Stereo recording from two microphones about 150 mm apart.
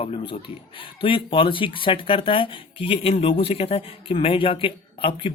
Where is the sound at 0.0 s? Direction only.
35° left (ahead or behind).